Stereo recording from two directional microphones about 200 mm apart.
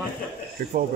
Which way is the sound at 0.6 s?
45° right (ahead or behind).